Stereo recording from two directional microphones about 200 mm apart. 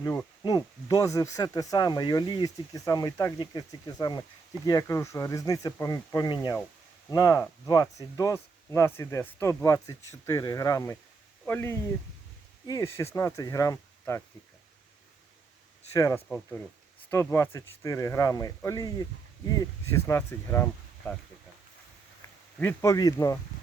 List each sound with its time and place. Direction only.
0.0 s speech: 5° left (ahead or behind)
0.4 s speech: 20° left (ahead or behind)
15.9 s speech: 15° left (ahead or behind)
22.6 s speech: 15° left (ahead or behind)